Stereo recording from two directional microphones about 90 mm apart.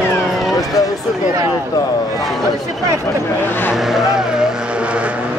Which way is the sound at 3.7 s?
5° right (ahead or behind).